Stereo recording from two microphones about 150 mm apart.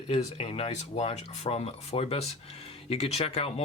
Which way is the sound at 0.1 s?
40° left (ahead or behind).